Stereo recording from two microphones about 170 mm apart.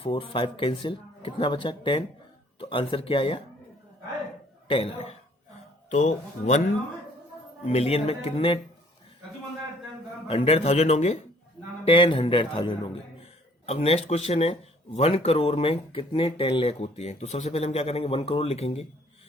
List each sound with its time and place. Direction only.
0.0 s speech: 30° left (ahead or behind)
4.7 s speech: 35° left (ahead or behind)
7.6 s speech: 40° left (ahead or behind)
10.2 s speech: 35° left (ahead or behind)